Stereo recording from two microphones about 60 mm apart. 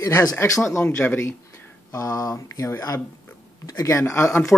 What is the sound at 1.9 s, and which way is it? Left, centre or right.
Speech, left.